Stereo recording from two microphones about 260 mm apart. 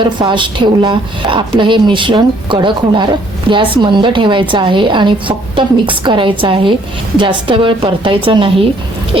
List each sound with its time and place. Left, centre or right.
0.0 s a woman's voice: centre